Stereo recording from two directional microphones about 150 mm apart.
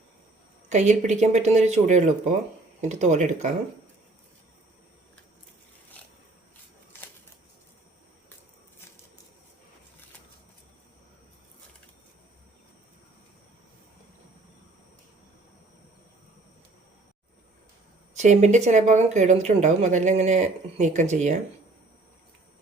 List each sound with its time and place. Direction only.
0.7 s speech: 50° right (ahead or behind)
18.2 s speech: 50° right (ahead or behind)